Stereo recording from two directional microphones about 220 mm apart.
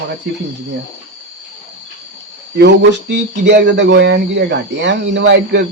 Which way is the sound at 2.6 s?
50° right (ahead or behind).